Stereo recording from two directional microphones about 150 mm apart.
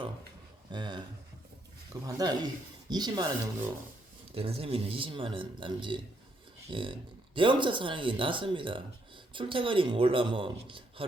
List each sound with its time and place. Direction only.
0.7 s speech: 30° right (ahead or behind)
4.4 s speech: 40° right (ahead or behind)